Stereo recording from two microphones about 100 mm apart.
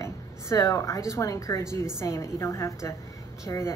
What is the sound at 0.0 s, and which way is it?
A woman's voice, 30° left (ahead or behind).